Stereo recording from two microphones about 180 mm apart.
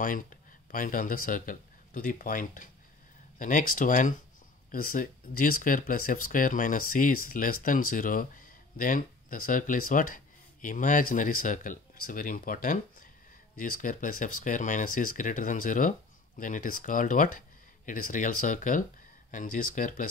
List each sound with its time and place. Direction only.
0.0 s speech: 50° left (ahead or behind)